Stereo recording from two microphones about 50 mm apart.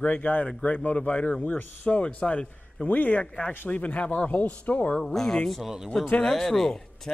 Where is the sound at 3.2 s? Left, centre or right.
Centre.